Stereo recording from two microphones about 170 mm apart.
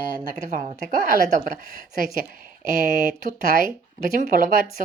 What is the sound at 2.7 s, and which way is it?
A woman's voice, 50° right (ahead or behind).